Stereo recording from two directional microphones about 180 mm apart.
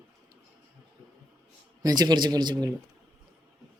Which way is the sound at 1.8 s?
20° right (ahead or behind).